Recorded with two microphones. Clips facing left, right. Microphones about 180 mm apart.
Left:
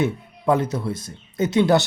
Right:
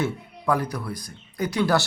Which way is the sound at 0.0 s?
20° left (ahead or behind).